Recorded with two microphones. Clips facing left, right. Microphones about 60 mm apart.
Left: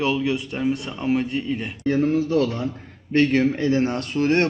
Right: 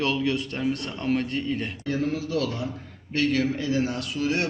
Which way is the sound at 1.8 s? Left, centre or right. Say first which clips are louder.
Left 11 dB; left.